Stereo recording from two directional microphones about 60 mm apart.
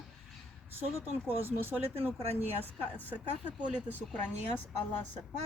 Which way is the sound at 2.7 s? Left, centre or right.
Left.